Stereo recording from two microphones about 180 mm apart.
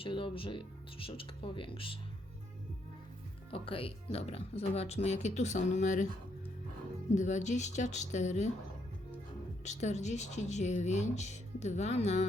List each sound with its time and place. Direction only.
0.0 s speech: 30° left (ahead or behind)
3.5 s speech: 30° left (ahead or behind)
7.1 s speech: 40° left (ahead or behind)
9.6 s speech: 40° left (ahead or behind)